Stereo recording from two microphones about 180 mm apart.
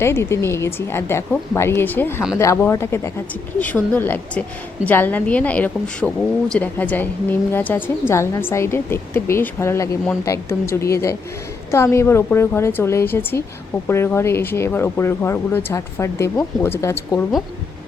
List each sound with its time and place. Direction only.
0.0 s a woman's voice: 15° left (ahead or behind)